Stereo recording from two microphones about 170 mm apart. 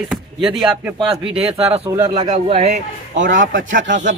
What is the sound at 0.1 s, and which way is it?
Speech, 5° right (ahead or behind).